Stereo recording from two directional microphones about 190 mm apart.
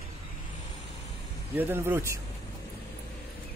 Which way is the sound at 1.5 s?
10° right (ahead or behind).